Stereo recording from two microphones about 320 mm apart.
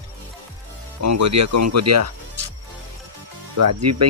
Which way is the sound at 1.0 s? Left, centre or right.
Right.